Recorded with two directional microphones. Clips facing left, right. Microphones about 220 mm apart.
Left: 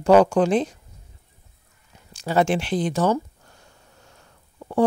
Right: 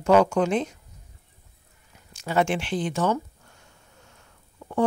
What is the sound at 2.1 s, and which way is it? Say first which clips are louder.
Speech: left 3 dB; 35° left (ahead or behind).